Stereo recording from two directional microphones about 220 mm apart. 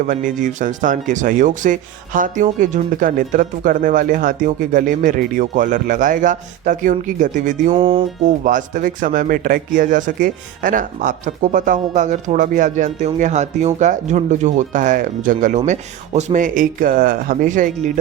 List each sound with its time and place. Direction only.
0.0 s speech: 35° right (ahead or behind)
7.7 s music: 20° right (ahead or behind)
8.2 s speech: 35° right (ahead or behind)